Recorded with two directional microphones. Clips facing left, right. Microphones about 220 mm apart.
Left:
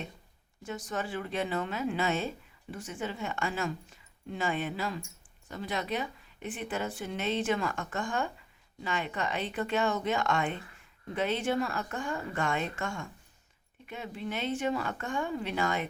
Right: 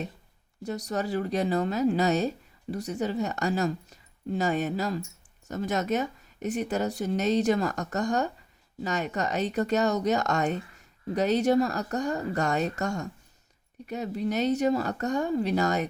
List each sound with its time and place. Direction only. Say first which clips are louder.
0.6 s speech: right 5 dB; 40° right (ahead or behind)